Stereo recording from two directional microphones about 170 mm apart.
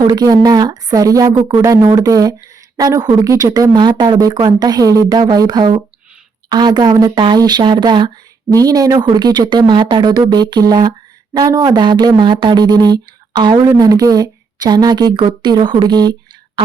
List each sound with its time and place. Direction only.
0.0 s speech: 20° right (ahead or behind)